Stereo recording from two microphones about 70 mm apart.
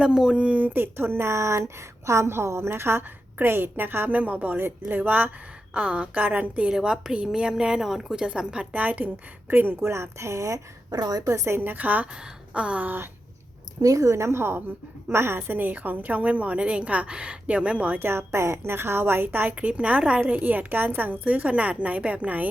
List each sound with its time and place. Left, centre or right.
0.0 s a woman's voice: centre
6.7 s a woman's voice: centre; by 9.9 s right
9.9 s a woman's voice: right
10.9 s speech: right
12.1 s a sound: centre
13.8 s a woman's voice: right